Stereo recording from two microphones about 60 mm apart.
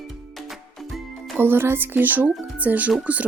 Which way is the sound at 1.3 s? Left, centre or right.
Right.